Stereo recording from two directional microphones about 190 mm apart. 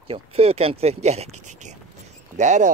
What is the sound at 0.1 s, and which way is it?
Speech, 30° right (ahead or behind).